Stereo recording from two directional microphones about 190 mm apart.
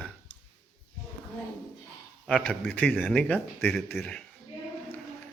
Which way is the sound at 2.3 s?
5° left (ahead or behind).